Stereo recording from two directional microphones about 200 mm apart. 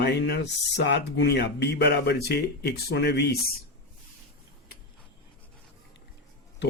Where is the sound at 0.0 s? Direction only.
55° left (ahead or behind).